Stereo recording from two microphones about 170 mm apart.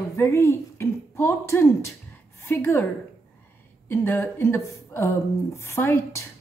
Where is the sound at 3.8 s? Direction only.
15° left (ahead or behind).